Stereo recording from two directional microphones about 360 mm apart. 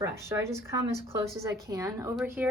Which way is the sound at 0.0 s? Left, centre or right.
Centre.